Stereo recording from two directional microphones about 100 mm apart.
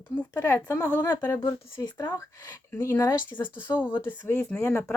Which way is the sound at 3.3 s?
20° left (ahead or behind).